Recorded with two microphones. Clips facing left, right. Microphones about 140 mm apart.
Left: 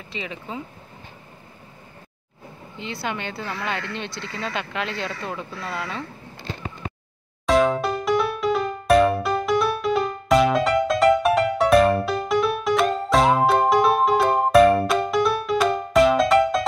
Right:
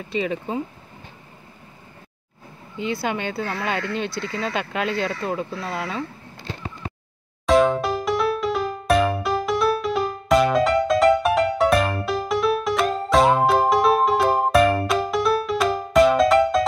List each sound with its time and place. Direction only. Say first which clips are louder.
0.1 s speech: right 8 dB; 45° right (ahead or behind)
3.5 s speech: right 4 dB; 5° right (ahead or behind)
4.4 s speech: right 2 dB; 35° right (ahead or behind)
7.4 s music: right 1 dB; centre (ahead or behind)